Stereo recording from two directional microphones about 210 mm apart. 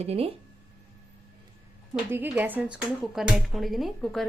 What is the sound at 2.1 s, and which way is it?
Speech, 10° right (ahead or behind).